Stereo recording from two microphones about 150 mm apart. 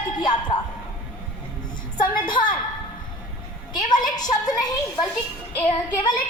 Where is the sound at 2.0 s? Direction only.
30° left (ahead or behind).